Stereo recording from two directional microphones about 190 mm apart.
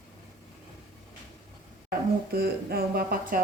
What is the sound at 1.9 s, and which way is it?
Speech, 55° right (ahead or behind).